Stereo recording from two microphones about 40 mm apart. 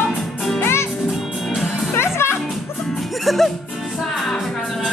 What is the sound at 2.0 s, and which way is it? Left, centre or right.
Music, left.